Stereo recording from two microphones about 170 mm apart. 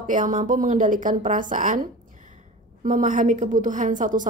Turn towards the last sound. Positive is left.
turn(degrees=-50)  # may be behind; listen again after turning